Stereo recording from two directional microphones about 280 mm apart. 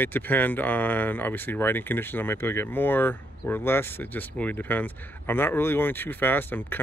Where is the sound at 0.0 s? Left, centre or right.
Centre.